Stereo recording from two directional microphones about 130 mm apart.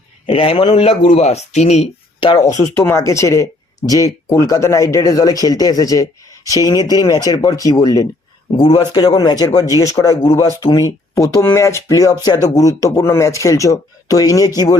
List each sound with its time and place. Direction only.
0.3 s speech: 45° left (ahead or behind)
2.6 s a man's voice: 20° left (ahead or behind)